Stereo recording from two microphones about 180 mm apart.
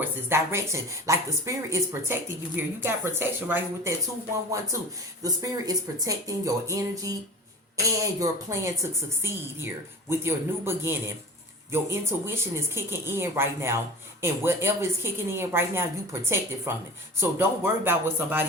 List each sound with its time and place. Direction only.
0.3 s speech: 15° right (ahead or behind)
10.1 s speech: 15° right (ahead or behind)